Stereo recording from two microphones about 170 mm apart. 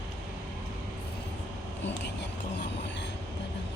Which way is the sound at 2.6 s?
90° left.